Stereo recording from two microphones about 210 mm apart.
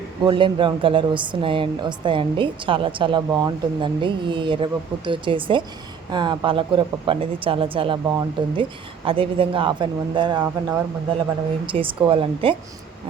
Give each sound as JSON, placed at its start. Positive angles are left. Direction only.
{"t": 0.3, "sound": "a woman's voice", "side_deg": -25}